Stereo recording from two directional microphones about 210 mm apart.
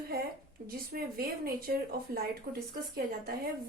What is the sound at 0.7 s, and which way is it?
Speech, 45° right (ahead or behind).